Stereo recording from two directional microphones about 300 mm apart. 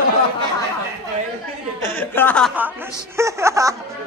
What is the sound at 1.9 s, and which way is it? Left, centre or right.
Speech, centre.